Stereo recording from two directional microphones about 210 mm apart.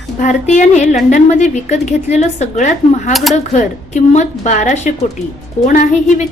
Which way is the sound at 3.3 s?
30° left (ahead or behind).